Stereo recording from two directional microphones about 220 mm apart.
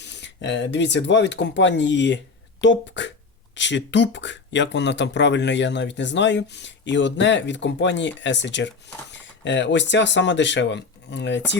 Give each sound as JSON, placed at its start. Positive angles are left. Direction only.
{"t": 0.0, "sound": "speech", "side_deg": 50}